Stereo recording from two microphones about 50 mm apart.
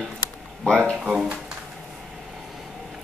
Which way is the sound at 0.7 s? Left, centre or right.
Left.